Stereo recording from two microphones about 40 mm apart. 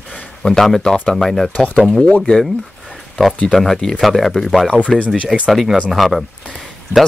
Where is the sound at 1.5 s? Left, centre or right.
Left.